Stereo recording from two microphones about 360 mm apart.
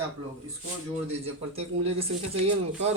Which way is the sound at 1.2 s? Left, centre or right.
Centre.